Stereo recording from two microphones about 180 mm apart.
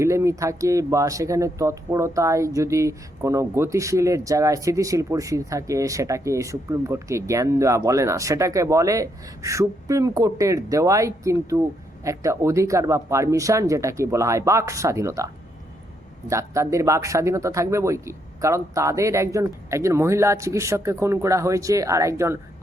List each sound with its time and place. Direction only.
0.0 s speech: 15° right (ahead or behind)